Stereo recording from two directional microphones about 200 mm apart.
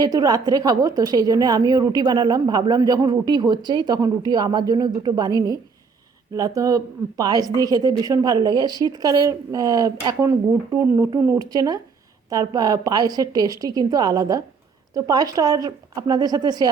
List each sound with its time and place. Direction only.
0.0 s a woman's voice: 20° right (ahead or behind)